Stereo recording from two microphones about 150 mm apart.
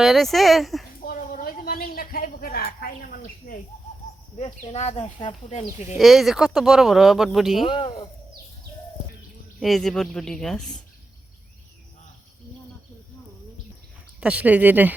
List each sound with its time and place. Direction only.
0.0 s speech: centre (ahead or behind)
1.0 s a sound: 65° left (ahead or behind)
4.4 s speech: 40° left (ahead or behind)
6.0 s speech: centre (ahead or behind)
7.7 s speech: 35° left (ahead or behind)
9.6 s speech: centre (ahead or behind)
14.2 s speech: 10° right (ahead or behind)